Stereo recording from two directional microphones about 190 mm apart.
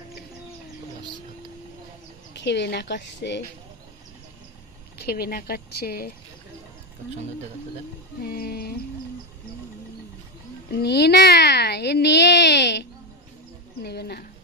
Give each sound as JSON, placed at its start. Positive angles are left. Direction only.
{"t": 2.4, "sound": "a child's voice", "side_deg": 65}
{"t": 5.0, "sound": "speech", "side_deg": 55}
{"t": 8.2, "sound": "a child's voice", "side_deg": 55}
{"t": 10.7, "sound": "a child's voice", "side_deg": 60}